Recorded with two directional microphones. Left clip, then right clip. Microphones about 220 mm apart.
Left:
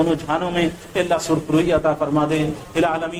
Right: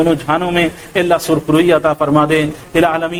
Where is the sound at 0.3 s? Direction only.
35° right (ahead or behind).